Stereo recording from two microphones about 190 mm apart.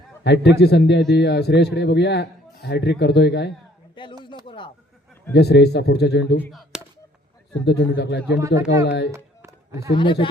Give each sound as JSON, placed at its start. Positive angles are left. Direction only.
{"t": 0.3, "sound": "a man's voice", "side_deg": 60}
{"t": 4.0, "sound": "speech", "side_deg": 25}
{"t": 4.4, "sound": "bleat", "side_deg": 25}
{"t": 5.3, "sound": "a man's voice", "side_deg": 60}
{"t": 6.5, "sound": "a sound", "side_deg": 0}
{"t": 7.6, "sound": "a man's voice", "side_deg": 65}
{"t": 8.4, "sound": "speech", "side_deg": -15}
{"t": 8.8, "sound": "a man's voice", "side_deg": 65}
{"t": 9.1, "sound": "a sound", "side_deg": -15}
{"t": 9.9, "sound": "a man's voice", "side_deg": 25}